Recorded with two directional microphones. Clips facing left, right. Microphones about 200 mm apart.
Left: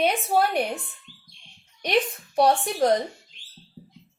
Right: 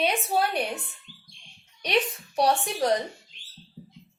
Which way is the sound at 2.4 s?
55° left (ahead or behind).